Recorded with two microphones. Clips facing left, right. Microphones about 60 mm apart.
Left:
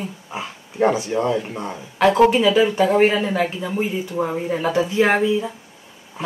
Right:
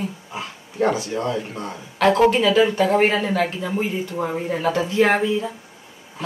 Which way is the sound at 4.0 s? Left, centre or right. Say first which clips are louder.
Left 2 dB; centre.